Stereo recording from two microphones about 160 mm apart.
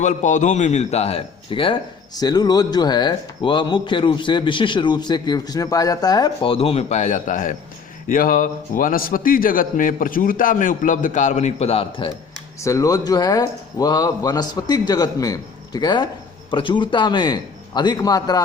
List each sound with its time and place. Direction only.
0.0 s a man's voice: 50° left (ahead or behind)
12.5 s speech: 20° left (ahead or behind)